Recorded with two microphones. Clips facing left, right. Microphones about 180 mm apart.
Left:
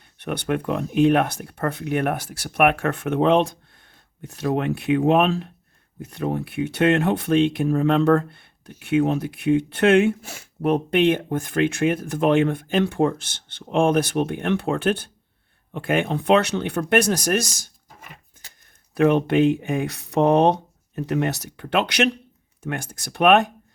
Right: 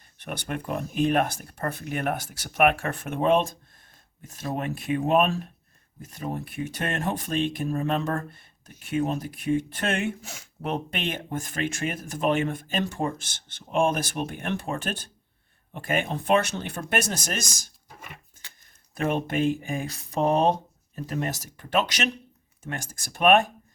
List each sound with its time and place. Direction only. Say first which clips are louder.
0.0 s speech: left 8 dB; 65° left (ahead or behind)
18.9 s speech: left 8 dB; 65° left (ahead or behind)